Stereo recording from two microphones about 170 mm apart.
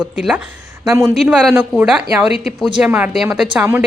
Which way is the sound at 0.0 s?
Centre (ahead or behind).